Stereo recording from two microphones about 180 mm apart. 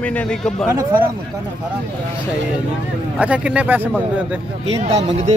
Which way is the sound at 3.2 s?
5° right (ahead or behind).